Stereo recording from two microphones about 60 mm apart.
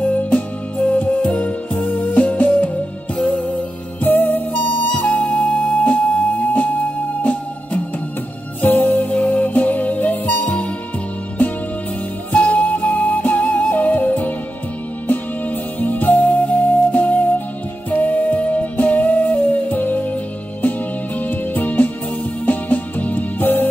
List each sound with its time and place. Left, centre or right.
0.0 s music: left
15.8 s music: left
21.2 s music: left